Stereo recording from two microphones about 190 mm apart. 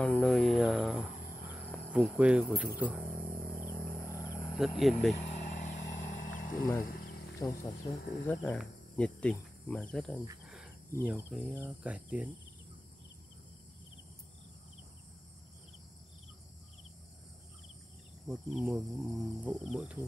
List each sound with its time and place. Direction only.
0.0 s a sound: 5° left (ahead or behind)
1.9 s speech: 5° right (ahead or behind)
3.8 s a sound: 15° left (ahead or behind)
4.6 s cricket: centre (ahead or behind)
5.3 s vehicle: 35° left (ahead or behind)
5.9 s a sound: 40° left (ahead or behind)
7.3 s speech: 15° left (ahead or behind)
8.0 s speech: 60° left (ahead or behind)
8.3 s cricket: 5° left (ahead or behind)
11.1 s speech: 5° right (ahead or behind)
18.2 s cricket: centre (ahead or behind)